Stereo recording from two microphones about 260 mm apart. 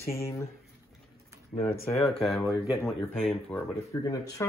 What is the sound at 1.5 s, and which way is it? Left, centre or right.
Speech, left.